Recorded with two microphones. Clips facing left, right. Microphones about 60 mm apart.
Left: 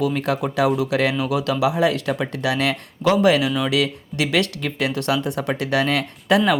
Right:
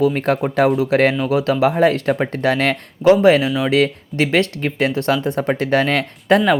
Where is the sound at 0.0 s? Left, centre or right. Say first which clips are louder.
Right 5 dB; right.